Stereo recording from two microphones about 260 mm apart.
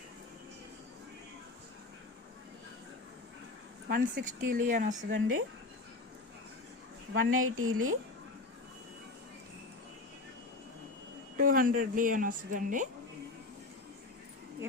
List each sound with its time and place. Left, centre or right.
3.8 s speech: right
7.1 s a woman's voice: right
11.3 s speech: right